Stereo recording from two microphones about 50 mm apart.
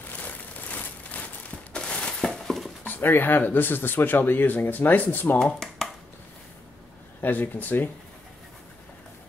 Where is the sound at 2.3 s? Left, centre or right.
Centre.